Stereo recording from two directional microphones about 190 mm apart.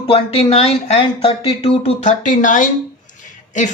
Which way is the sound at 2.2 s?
45° left (ahead or behind).